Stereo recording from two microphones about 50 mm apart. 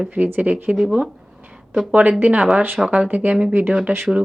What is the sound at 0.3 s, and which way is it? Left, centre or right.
Speech, right.